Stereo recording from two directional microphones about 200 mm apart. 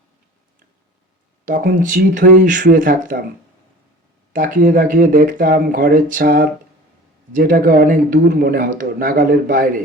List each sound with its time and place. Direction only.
1.5 s speech: 40° right (ahead or behind)
4.3 s a man's voice: 45° right (ahead or behind)